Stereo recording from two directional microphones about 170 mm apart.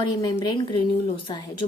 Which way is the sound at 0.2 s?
20° left (ahead or behind).